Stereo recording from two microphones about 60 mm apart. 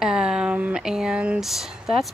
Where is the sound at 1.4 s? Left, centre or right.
Centre.